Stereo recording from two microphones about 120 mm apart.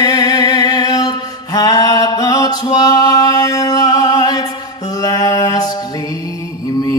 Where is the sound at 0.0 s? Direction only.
35° left (ahead or behind).